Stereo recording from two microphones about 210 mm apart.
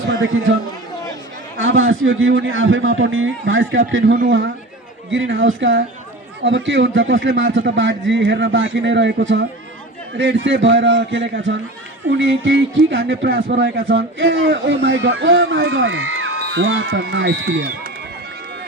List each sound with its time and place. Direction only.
1.5 s a man's voice: 70° right (ahead or behind); by 4.4 s 55° right (ahead or behind)
5.1 s a man's voice: 65° right (ahead or behind)